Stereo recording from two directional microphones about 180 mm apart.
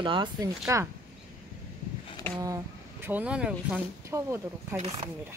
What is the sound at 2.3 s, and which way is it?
Speech, 20° right (ahead or behind).